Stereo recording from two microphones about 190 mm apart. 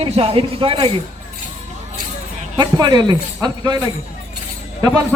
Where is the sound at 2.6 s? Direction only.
25° right (ahead or behind).